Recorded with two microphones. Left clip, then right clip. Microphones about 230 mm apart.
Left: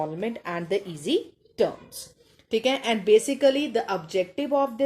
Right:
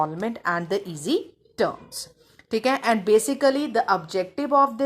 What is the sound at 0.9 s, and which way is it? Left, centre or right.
Speech, centre.